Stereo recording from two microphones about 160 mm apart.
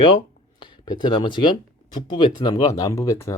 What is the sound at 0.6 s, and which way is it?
Speech, 25° left (ahead or behind).